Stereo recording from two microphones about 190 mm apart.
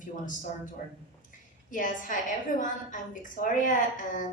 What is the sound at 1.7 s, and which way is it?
A woman's voice, 45° left (ahead or behind).